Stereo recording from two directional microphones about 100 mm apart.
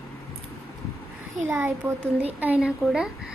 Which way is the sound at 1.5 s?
25° right (ahead or behind).